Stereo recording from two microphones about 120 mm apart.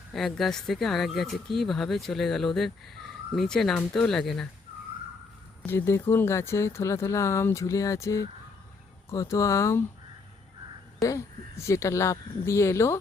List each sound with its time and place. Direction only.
0.1 s speech: centre (ahead or behind)
5.6 s speech: 20° left (ahead or behind)
11.0 s speech: 25° left (ahead or behind)